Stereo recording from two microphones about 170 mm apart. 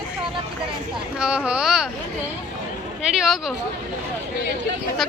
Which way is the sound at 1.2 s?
5° right (ahead or behind).